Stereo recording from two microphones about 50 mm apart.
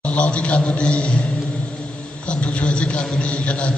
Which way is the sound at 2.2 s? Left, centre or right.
Left.